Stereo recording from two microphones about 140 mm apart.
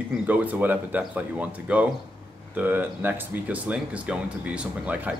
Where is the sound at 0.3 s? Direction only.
10° right (ahead or behind).